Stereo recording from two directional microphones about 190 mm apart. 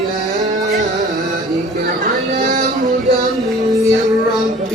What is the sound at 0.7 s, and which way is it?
Music, 45° right (ahead or behind).